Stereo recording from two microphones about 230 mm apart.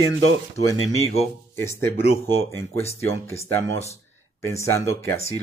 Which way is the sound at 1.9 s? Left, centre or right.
Left.